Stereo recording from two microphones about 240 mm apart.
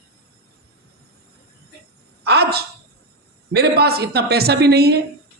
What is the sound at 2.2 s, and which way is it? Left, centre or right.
A woman's voice, right.